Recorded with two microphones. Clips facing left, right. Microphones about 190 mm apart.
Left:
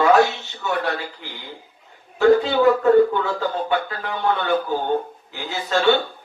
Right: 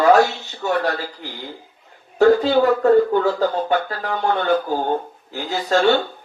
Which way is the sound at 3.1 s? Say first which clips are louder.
Right 5 dB; 40° right (ahead or behind).